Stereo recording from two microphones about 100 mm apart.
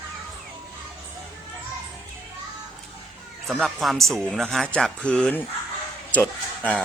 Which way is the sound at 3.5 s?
5° left (ahead or behind).